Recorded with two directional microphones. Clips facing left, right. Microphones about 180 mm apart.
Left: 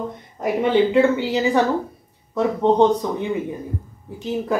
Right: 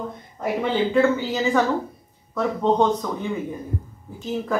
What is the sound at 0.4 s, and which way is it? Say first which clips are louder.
Speech: left 5 dB; 15° left (ahead or behind).